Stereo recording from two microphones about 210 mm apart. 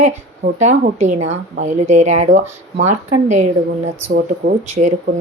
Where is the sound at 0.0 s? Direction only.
35° right (ahead or behind).